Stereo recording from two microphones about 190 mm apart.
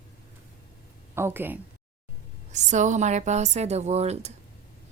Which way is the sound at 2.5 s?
40° right (ahead or behind).